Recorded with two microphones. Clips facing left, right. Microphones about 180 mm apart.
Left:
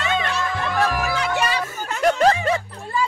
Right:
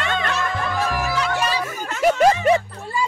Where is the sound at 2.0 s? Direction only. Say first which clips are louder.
Right 1 dB; 5° right (ahead or behind).